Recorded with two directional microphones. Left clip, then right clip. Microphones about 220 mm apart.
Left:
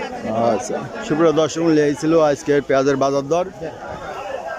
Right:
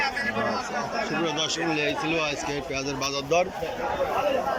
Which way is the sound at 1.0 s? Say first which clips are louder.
Left 10 dB; 40° left (ahead or behind).